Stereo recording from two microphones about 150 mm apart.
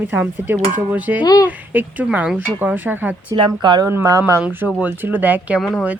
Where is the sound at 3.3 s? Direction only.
30° right (ahead or behind).